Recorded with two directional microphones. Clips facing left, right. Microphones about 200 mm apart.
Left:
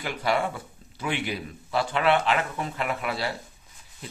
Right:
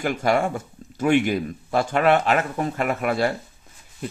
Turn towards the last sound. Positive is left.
turn(degrees=-50)  # may be behind; listen again after turning